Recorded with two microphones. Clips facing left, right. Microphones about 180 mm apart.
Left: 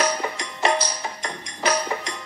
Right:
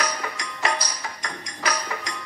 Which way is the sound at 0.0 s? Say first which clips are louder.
Left 5 dB; 25° left (ahead or behind).